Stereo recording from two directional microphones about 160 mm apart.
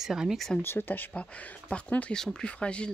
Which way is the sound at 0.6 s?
15° left (ahead or behind).